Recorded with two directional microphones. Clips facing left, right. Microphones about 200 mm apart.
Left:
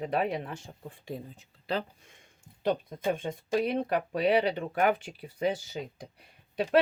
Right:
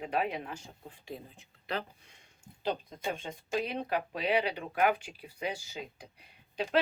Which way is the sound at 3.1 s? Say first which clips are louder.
Left 5 dB; 50° left (ahead or behind).